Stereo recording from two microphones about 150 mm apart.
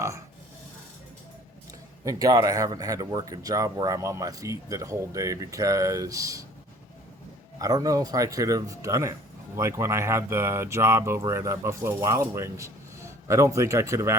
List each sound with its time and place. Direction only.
2.0 s speech: 25° right (ahead or behind)
7.6 s speech: 25° right (ahead or behind)